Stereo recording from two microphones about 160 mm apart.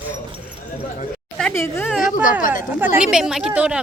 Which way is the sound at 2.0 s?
55° left (ahead or behind).